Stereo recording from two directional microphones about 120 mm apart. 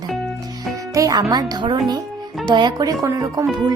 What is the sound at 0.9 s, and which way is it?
Speech, 30° right (ahead or behind).